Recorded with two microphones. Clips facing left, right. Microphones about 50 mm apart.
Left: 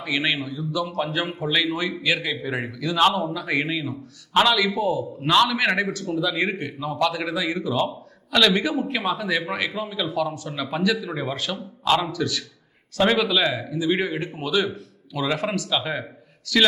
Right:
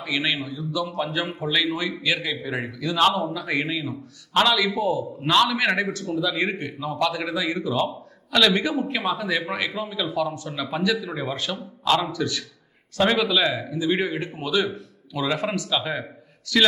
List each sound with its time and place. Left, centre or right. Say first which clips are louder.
0.1 s a man's voice: left 1 dB; centre
6.2 s a man's voice: even; centre
6.7 s a man's voice: left 1 dB; centre